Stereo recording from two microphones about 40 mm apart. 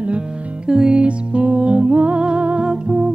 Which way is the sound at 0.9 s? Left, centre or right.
Right.